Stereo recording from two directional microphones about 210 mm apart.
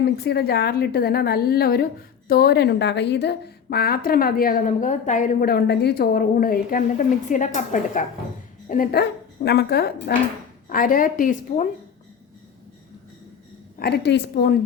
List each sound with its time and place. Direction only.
0.0 s a woman's voice: 50° left (ahead or behind)
13.7 s a woman's voice: 50° left (ahead or behind)